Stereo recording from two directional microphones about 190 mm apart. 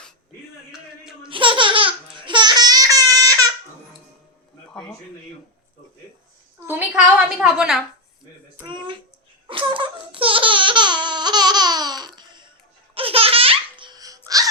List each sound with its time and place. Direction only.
0.7 s music: 5° right (ahead or behind)
1.3 s laughter: 25° right (ahead or behind)
4.7 s a sound: 5° left (ahead or behind)
6.6 s a woman's voice: 10° right (ahead or behind)
8.6 s speech: 25° right (ahead or behind)
9.5 s laughter: 25° right (ahead or behind)